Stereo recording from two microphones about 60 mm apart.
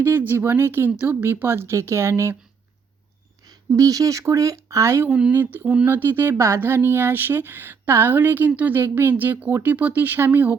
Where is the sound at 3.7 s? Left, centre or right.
Right.